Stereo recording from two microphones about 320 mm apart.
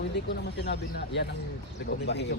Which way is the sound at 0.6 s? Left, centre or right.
Left.